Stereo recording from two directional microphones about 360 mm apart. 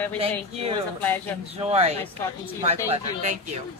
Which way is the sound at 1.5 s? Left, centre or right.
Centre.